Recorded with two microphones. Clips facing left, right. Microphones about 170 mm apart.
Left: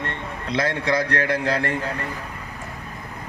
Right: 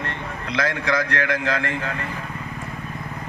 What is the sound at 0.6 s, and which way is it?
A man's voice, 30° left (ahead or behind).